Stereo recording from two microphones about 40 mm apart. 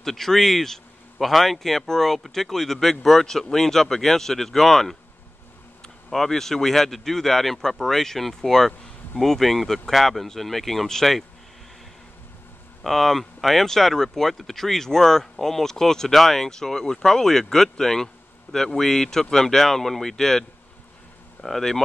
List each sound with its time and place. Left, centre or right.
0.0 s speech: centre
6.0 s speech: centre
12.8 s speech: centre